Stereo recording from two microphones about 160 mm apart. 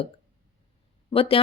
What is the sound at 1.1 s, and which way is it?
Speech, 35° left (ahead or behind).